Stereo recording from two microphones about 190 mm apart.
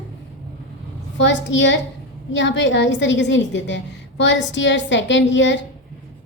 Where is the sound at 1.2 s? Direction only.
70° left (ahead or behind).